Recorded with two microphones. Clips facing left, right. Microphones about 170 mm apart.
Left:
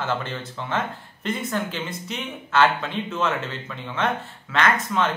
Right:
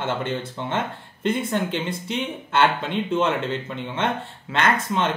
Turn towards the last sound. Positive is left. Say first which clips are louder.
# even
turn(degrees=-25)  # may be behind; listen again after turning